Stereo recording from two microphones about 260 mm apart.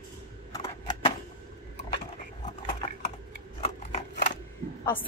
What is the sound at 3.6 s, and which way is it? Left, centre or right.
Scissors, left.